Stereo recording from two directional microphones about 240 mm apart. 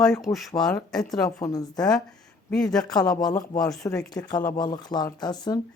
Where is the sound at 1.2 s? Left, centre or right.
Centre.